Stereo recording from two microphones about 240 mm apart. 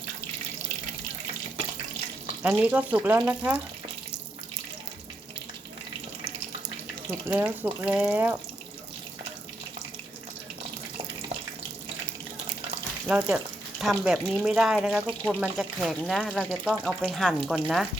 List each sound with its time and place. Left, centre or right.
2.4 s speech: centre
7.3 s speech: centre
13.1 s speech: centre